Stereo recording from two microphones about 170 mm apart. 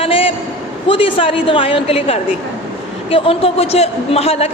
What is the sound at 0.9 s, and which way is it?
A man's voice, 30° left (ahead or behind).